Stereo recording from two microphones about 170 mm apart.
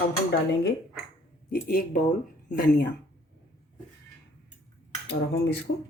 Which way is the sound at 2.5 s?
75° left (ahead or behind).